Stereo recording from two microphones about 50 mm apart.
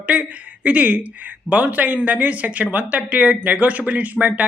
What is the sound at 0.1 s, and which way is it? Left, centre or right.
Speech, right.